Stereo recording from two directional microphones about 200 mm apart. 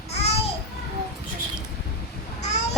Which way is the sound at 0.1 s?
30° left (ahead or behind).